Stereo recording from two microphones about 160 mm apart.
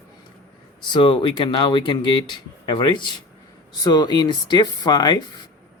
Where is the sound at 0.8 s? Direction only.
30° left (ahead or behind).